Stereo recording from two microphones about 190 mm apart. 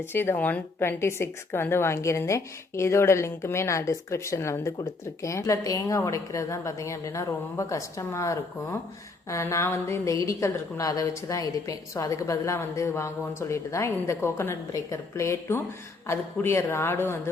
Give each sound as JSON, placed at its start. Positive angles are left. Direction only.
{"t": 0.0, "sound": "a woman's voice", "side_deg": 10}